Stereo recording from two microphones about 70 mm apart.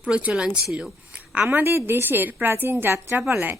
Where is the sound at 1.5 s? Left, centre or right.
Right.